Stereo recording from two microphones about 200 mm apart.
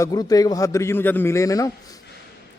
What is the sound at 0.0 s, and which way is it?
A man's voice, 20° left (ahead or behind).